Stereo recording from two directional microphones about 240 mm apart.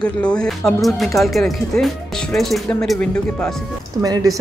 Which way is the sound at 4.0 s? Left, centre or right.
Centre.